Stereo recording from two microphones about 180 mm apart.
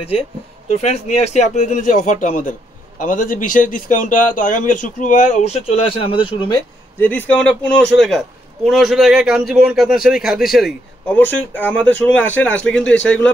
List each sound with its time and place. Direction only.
0.7 s speech: 35° left (ahead or behind)
7.0 s a man's voice: 10° left (ahead or behind)